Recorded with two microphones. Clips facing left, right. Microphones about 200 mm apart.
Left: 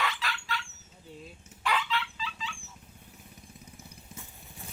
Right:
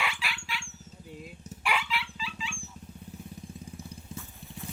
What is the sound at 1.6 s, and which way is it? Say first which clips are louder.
Dog: left 1 dB; 10° right (ahead or behind).